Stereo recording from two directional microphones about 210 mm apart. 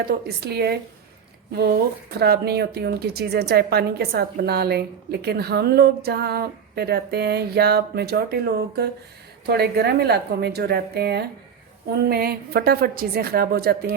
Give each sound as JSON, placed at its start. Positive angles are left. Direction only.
{"t": 0.0, "sound": "a woman's voice", "side_deg": -50}
{"t": 2.1, "sound": "a woman's voice", "side_deg": -50}